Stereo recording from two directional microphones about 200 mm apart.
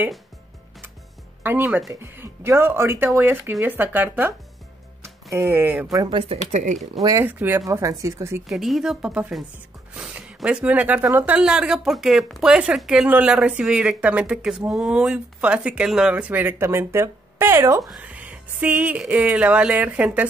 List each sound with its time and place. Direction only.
1.4 s speech: 10° right (ahead or behind)
5.3 s speech: 10° right (ahead or behind)
5.9 s speech: 20° right (ahead or behind); by 6.9 s 35° right (ahead or behind)
7.0 s speech: 15° right (ahead or behind)
8.5 s speech: centre (ahead or behind)